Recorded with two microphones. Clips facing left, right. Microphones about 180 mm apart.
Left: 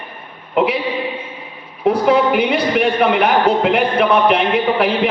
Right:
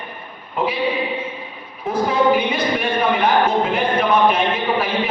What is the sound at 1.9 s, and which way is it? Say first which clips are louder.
A man's voice: left 3 dB; 70° left (ahead or behind).